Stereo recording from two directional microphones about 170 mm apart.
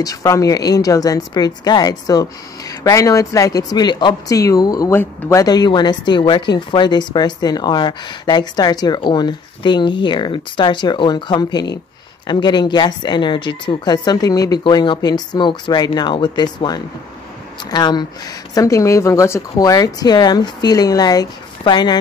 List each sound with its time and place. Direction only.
0.0 s speech: 20° left (ahead or behind)